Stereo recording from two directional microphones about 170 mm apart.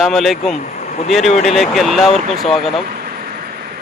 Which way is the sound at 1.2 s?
40° left (ahead or behind).